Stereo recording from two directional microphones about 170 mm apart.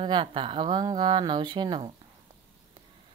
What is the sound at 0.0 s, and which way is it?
Speech, 30° right (ahead or behind).